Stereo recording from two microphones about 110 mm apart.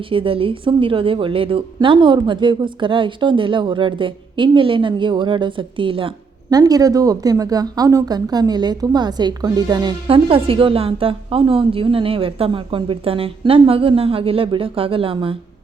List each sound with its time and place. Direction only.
0.0 s a woman's voice: 55° right (ahead or behind)
6.5 s speech: 35° right (ahead or behind)
10.1 s a woman's voice: 55° right (ahead or behind)